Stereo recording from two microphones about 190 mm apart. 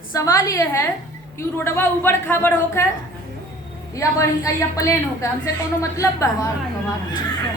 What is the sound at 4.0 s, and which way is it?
A woman's voice, 15° left (ahead or behind).